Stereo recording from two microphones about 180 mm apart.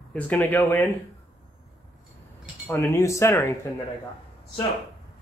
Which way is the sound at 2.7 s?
15° left (ahead or behind).